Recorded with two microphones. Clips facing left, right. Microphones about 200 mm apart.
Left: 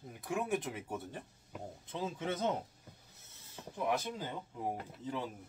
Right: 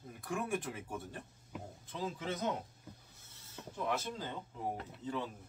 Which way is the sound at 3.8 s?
15° left (ahead or behind).